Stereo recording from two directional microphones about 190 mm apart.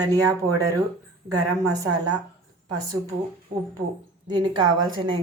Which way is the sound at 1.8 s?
20° right (ahead or behind).